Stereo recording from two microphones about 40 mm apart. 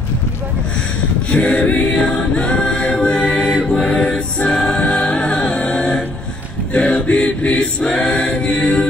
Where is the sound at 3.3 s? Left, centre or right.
Left.